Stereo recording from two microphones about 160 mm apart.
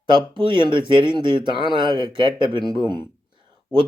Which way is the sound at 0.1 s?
30° right (ahead or behind).